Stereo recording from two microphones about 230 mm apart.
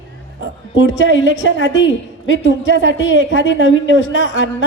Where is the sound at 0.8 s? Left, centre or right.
Left.